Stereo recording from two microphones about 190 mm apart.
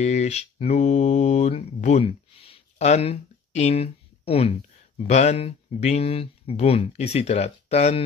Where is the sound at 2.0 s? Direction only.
30° left (ahead or behind).